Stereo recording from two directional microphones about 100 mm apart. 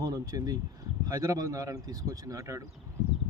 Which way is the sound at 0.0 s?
35° right (ahead or behind).